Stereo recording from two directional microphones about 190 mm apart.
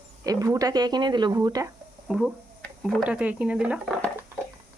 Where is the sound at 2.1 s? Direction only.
5° right (ahead or behind).